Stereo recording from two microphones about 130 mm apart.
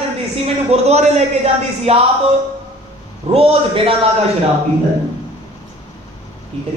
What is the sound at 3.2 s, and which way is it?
Speech, 50° right (ahead or behind).